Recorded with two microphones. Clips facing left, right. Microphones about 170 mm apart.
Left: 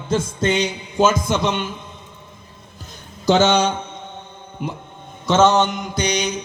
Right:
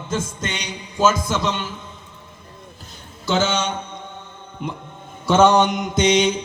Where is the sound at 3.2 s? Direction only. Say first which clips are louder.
Left 5 dB; 40° left (ahead or behind).